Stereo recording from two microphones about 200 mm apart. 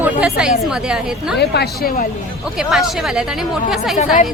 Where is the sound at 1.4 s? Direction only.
55° left (ahead or behind).